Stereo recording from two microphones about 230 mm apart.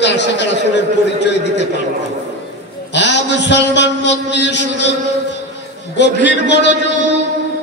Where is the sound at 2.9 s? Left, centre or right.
Left.